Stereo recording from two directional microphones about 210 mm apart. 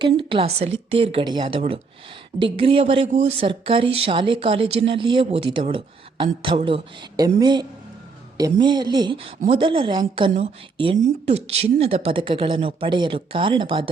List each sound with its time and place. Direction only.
0.0 s speech: 25° right (ahead or behind)